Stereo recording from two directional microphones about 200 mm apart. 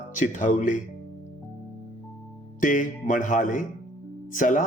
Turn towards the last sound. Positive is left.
turn(degrees=40)  # may be behind; listen again after turning